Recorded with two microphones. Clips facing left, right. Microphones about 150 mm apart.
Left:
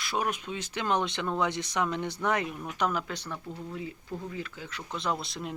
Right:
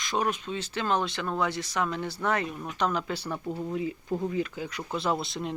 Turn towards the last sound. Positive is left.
turn(degrees=0)  # may be behind; listen again after turning